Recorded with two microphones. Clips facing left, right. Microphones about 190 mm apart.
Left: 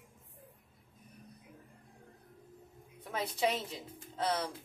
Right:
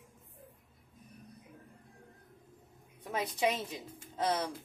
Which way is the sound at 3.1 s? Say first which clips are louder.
Right 1 dB; 15° right (ahead or behind).